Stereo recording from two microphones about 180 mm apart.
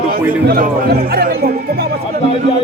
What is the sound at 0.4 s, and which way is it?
Speech, 55° right (ahead or behind).